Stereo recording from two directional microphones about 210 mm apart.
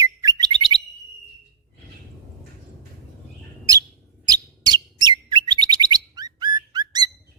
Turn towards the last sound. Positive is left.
turn(degrees=-20)  # may be behind; listen again after turning